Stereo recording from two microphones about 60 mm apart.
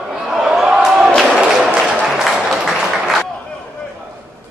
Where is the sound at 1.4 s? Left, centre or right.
Centre.